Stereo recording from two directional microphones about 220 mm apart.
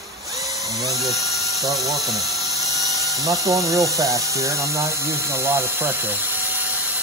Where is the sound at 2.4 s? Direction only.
15° right (ahead or behind).